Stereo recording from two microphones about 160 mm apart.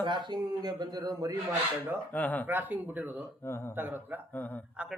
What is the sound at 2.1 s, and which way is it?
Speech, 10° left (ahead or behind).